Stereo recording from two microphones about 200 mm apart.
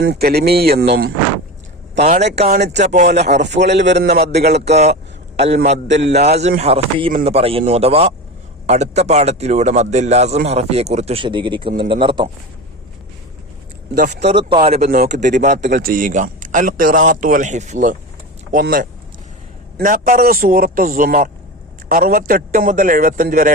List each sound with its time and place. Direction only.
0.0 s a man's voice: 50° right (ahead or behind)
2.0 s a man's voice: 35° right (ahead or behind)
3.6 s a man's voice: 60° right (ahead or behind)
4.7 s a man's voice: 35° right (ahead or behind)
5.9 s a man's voice: 55° right (ahead or behind)
6.6 s a man's voice: 30° right (ahead or behind)
13.9 s a man's voice: 40° right (ahead or behind)
14.3 s a man's voice: 30° right (ahead or behind)
14.8 s a man's voice: 50° right (ahead or behind)
15.2 s a man's voice: 40° right (ahead or behind)